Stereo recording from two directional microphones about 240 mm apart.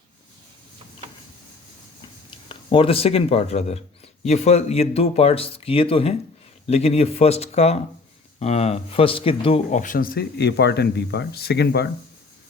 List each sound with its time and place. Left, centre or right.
2.5 s speech: left